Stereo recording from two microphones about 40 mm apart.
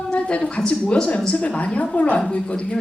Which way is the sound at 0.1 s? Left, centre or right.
Left.